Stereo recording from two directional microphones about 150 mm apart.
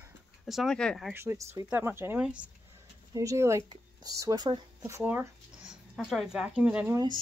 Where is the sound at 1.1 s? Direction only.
20° right (ahead or behind).